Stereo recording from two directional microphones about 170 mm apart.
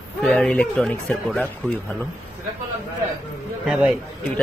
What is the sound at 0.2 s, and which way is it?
Speech, 5° left (ahead or behind).